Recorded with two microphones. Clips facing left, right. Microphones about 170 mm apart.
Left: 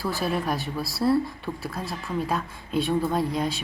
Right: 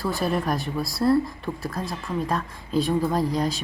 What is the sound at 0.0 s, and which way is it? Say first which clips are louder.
Speech: right 2 dB; centre (ahead or behind).